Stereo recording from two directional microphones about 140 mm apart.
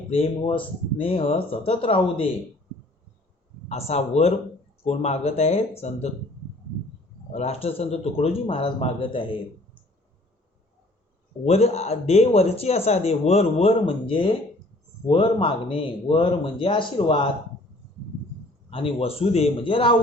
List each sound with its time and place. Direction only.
0.1 s speech: 40° left (ahead or behind)
3.7 s speech: 50° left (ahead or behind)
7.3 s speech: 45° left (ahead or behind)
11.4 s speech: 50° left (ahead or behind)
18.7 s speech: 40° left (ahead or behind)